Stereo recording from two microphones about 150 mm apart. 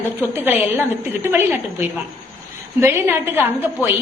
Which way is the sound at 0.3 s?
15° right (ahead or behind).